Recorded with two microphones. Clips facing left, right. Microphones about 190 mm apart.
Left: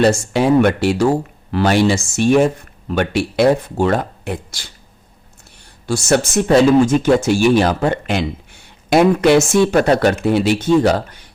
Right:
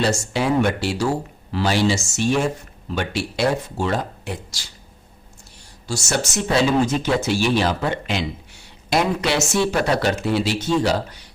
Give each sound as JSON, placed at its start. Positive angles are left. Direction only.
{"t": 0.0, "sound": "speech", "side_deg": 55}
{"t": 5.9, "sound": "speech", "side_deg": 55}